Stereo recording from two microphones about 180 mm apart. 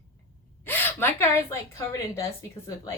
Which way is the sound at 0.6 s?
10° left (ahead or behind).